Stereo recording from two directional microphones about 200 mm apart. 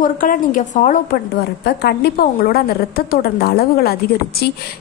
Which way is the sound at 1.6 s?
55° left (ahead or behind).